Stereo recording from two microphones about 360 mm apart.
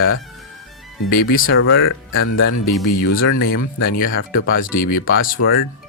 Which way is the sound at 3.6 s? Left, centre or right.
Left.